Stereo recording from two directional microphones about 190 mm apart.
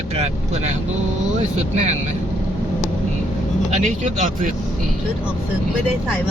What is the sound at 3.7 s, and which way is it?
Speech, 40° right (ahead or behind).